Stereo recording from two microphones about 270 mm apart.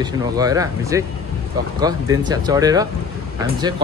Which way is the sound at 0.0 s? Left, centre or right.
Centre.